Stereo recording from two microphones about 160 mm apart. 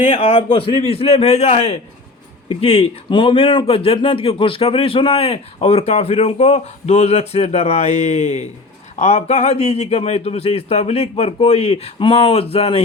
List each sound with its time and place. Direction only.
0.0 s a man's voice: 50° left (ahead or behind)
0.5 s speech: 35° left (ahead or behind)